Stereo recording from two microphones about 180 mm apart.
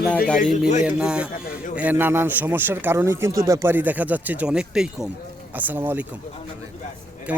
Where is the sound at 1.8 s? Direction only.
10° right (ahead or behind).